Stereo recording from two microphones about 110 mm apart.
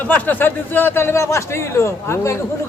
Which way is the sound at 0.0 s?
15° left (ahead or behind).